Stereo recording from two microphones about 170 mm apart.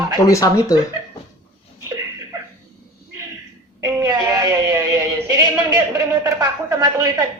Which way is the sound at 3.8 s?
20° right (ahead or behind).